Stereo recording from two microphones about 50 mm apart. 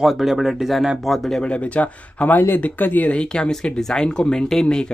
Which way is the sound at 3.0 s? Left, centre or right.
Centre.